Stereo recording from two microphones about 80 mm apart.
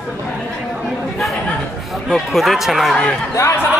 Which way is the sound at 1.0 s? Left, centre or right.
Centre.